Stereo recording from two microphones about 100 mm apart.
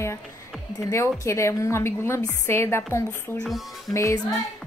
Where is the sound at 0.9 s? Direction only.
30° left (ahead or behind).